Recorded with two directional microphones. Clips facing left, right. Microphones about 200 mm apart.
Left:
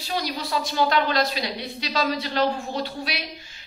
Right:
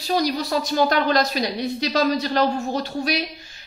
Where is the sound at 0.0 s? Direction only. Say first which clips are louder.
Right 7 dB; 40° right (ahead or behind).